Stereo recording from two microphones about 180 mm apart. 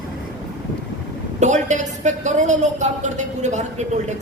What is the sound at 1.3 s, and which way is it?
A woman's voice, 40° right (ahead or behind).